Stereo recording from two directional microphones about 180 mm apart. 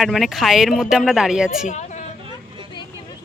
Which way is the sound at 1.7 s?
40° left (ahead or behind).